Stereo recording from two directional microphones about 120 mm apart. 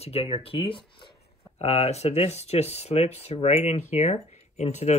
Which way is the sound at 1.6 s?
60° left (ahead or behind).